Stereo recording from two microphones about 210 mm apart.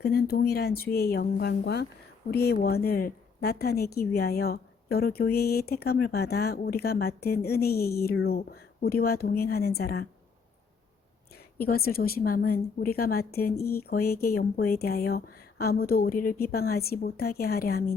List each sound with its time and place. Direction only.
0.0 s a woman's voice: 50° left (ahead or behind)
11.6 s a woman's voice: 45° left (ahead or behind)